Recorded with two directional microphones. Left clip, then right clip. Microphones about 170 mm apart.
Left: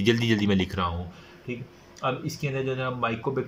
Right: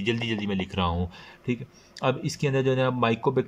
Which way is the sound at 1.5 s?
30° right (ahead or behind).